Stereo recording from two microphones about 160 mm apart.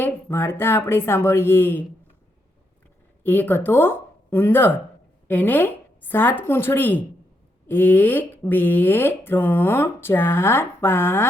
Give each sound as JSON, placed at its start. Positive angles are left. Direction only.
{"t": 0.0, "sound": "speech", "side_deg": 15}
{"t": 3.2, "sound": "speech", "side_deg": 10}